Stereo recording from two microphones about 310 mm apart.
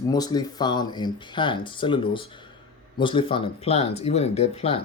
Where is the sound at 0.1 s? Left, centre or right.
Centre.